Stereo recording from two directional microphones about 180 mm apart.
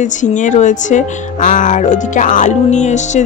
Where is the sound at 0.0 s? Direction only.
45° left (ahead or behind).